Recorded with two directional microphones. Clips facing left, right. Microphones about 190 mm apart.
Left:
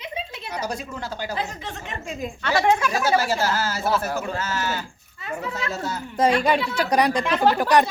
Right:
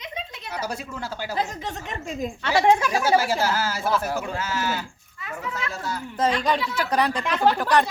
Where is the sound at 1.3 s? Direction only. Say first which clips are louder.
Right 2 dB; 40° right (ahead or behind).